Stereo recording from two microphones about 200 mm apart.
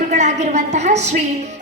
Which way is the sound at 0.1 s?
35° right (ahead or behind).